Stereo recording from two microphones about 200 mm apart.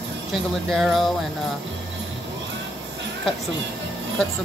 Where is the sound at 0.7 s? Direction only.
Centre (ahead or behind).